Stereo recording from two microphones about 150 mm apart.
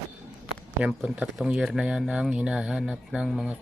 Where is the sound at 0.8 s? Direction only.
5° right (ahead or behind).